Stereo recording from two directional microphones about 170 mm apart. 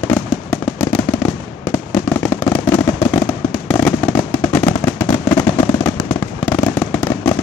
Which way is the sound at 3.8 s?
10° left (ahead or behind).